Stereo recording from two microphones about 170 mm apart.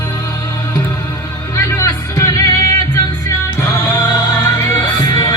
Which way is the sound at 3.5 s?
20° left (ahead or behind).